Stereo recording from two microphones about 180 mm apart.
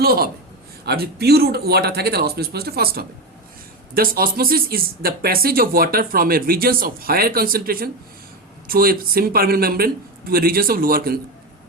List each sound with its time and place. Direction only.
0.0 s speech: 55° right (ahead or behind)